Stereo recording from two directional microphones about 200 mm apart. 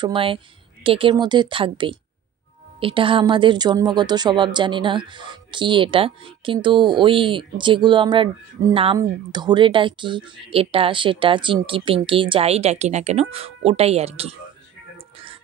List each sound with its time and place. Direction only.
0.0 s a woman's voice: 25° right (ahead or behind)